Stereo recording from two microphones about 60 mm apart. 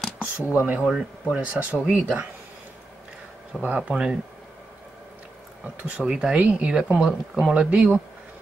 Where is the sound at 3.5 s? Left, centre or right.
Centre.